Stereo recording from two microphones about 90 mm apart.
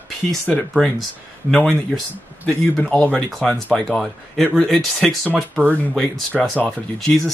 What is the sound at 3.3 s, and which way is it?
Speech, 5° left (ahead or behind).